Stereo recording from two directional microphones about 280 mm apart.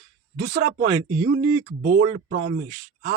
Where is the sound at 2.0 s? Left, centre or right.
Right.